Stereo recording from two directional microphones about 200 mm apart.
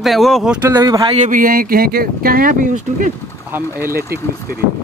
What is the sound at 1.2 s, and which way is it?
Speech, 40° right (ahead or behind).